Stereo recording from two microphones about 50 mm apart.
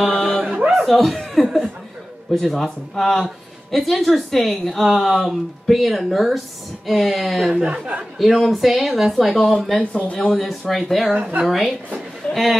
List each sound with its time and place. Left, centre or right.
0.1 s a sound: centre
0.6 s chuckle: centre
2.4 s a woman's voice: centre
7.5 s speech: right
8.2 s a woman's voice: centre
9.4 s a woman's voice: centre
12.2 s a sound: left